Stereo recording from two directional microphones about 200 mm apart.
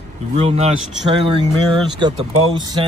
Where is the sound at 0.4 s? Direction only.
30° right (ahead or behind).